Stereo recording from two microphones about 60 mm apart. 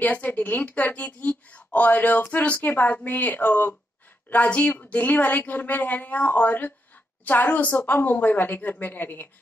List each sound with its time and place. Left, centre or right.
0.0 s a woman's voice: left